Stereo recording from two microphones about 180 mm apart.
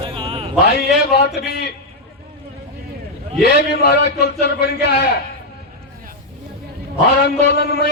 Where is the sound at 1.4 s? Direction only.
65° left (ahead or behind).